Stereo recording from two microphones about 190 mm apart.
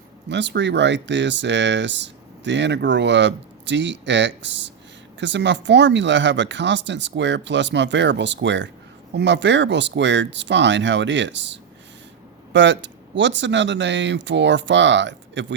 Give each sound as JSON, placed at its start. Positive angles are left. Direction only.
{"t": 0.3, "sound": "speech", "side_deg": -65}